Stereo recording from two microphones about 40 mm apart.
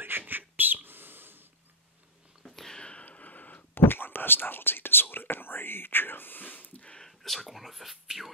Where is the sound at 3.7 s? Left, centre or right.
Left.